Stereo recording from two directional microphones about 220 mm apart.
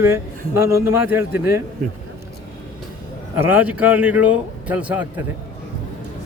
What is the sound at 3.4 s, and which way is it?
A man's voice, 10° right (ahead or behind).